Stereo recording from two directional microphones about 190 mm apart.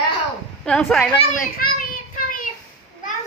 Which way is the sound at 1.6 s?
50° left (ahead or behind).